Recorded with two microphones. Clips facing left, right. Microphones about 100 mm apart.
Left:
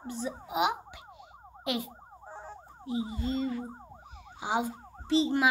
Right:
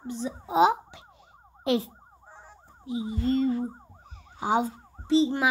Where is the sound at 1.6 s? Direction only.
30° right (ahead or behind).